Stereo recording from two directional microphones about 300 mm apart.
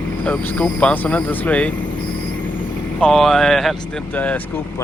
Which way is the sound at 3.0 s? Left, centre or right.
Centre.